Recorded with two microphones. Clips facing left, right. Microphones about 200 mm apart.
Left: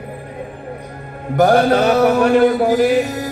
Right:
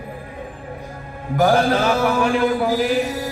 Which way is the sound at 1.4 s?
40° left (ahead or behind).